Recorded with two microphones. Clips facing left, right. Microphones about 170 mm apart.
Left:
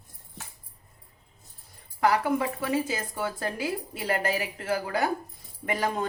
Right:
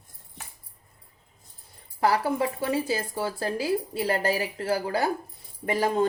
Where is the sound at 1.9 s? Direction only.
30° right (ahead or behind).